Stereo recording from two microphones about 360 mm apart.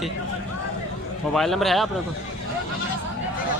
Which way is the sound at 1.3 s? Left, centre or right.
Centre.